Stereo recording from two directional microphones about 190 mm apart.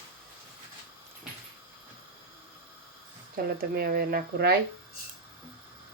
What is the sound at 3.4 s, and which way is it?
Speech, 55° right (ahead or behind).